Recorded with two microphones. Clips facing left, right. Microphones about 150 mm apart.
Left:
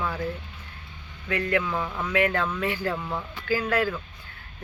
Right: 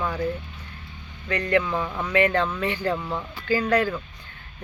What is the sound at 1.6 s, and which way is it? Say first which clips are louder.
Speech: right 2 dB; 5° right (ahead or behind).